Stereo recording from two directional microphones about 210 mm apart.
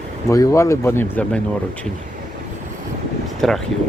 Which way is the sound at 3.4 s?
Centre (ahead or behind).